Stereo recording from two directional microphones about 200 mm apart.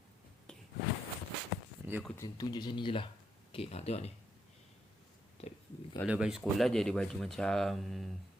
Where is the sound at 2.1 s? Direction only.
20° left (ahead or behind).